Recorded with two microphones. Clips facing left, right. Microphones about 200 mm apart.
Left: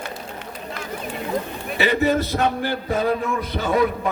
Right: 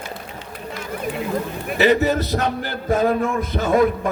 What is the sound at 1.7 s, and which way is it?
A man's voice, 45° right (ahead or behind).